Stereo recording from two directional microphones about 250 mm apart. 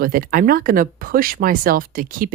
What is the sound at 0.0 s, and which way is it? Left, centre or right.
Speech, right.